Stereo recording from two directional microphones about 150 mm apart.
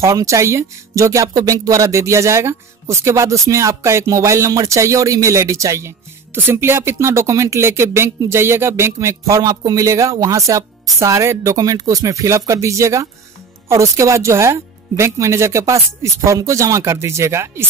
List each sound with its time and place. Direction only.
0.0 s speech: 20° right (ahead or behind)